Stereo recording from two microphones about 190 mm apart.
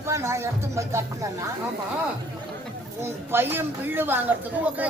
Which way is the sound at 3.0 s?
10° right (ahead or behind).